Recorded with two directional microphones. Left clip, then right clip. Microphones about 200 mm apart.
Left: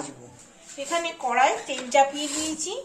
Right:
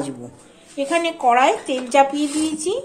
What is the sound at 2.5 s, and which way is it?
Speech, 55° right (ahead or behind).